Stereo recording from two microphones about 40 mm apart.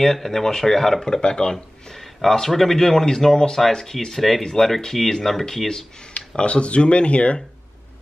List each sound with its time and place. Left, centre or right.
0.0 s speech: centre
6.1 s speech: left